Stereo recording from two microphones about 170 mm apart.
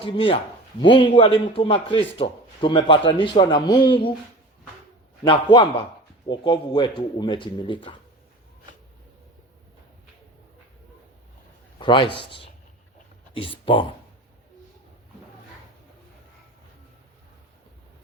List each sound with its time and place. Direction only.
0.0 s a man's voice: 30° left (ahead or behind)
5.2 s speech: 30° left (ahead or behind)
11.8 s speech: 30° left (ahead or behind)